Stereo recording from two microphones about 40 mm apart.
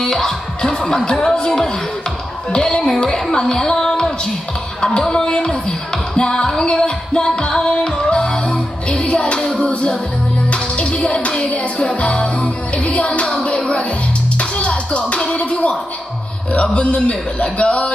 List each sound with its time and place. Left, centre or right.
0.0 s speech: centre
6.1 s music: centre
11.4 s music: left
16.7 s a man's voice: left